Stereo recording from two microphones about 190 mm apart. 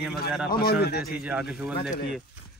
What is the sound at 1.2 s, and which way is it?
Speech, 5° right (ahead or behind).